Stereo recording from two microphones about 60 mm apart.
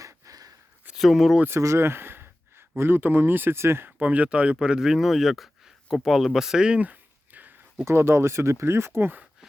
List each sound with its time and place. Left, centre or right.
0.0 s a sound: right
0.9 s speech: centre
1.5 s speech: right
4.0 s speech: right
7.9 s speech: right